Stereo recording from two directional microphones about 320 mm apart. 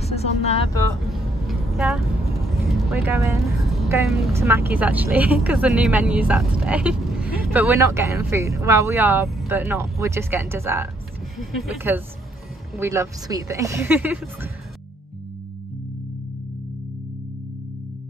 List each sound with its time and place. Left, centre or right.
0.0 s vehicle: centre
1.0 s vehicle: centre
3.1 s a woman's voice: centre